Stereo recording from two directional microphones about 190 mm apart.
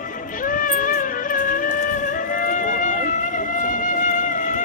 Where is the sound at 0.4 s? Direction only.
45° left (ahead or behind).